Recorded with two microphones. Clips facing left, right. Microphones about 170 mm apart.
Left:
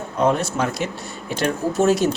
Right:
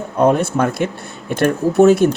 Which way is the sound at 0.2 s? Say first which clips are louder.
Right 5 dB; 55° right (ahead or behind).